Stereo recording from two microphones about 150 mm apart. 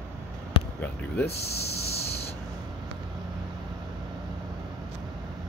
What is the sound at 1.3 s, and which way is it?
Speech, 90° left.